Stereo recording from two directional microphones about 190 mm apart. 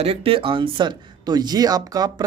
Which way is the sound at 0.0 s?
30° right (ahead or behind).